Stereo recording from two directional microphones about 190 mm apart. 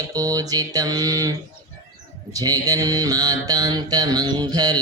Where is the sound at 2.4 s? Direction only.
20° right (ahead or behind).